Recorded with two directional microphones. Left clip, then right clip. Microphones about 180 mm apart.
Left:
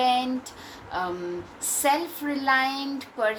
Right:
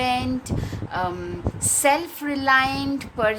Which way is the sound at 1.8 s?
50° right (ahead or behind).